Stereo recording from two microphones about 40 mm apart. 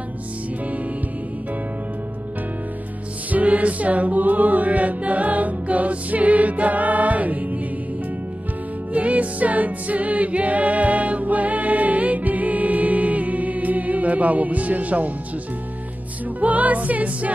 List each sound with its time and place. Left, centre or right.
3.3 s music: right
8.9 s music: right
16.3 s music: right